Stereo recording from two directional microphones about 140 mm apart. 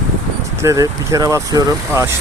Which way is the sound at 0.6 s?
20° right (ahead or behind).